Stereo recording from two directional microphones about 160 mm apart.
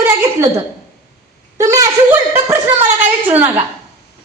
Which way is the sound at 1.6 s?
20° right (ahead or behind).